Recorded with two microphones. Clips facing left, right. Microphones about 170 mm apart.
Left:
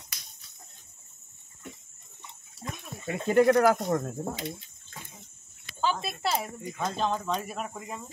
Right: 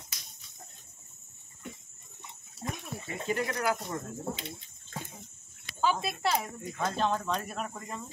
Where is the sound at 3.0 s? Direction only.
55° left (ahead or behind).